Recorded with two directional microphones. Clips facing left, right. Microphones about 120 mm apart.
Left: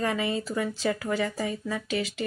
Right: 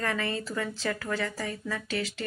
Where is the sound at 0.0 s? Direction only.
15° left (ahead or behind).